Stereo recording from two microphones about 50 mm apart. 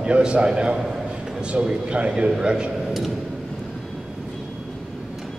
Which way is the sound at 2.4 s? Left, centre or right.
Centre.